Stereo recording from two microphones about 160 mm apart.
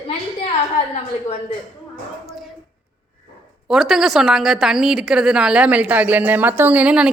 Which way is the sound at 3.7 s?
Centre (ahead or behind).